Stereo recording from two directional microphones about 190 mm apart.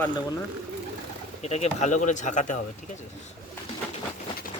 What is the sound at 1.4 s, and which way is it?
Speech, 35° left (ahead or behind).